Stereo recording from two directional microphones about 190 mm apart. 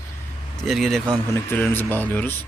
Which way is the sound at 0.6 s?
Centre (ahead or behind).